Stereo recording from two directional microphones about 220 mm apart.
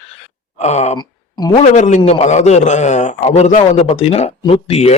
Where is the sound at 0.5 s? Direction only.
30° left (ahead or behind).